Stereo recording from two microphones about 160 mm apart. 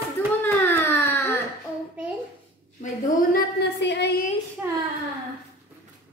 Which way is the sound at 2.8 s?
65° left (ahead or behind).